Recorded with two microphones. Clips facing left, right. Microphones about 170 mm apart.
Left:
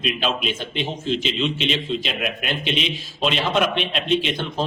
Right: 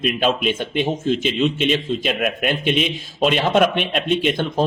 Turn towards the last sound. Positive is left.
turn(degrees=-50)  # may be behind; listen again after turning